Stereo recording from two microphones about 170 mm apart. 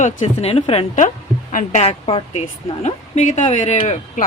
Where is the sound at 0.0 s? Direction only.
40° left (ahead or behind).